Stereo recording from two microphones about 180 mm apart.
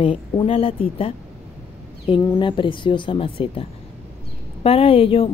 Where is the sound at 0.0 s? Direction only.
30° left (ahead or behind).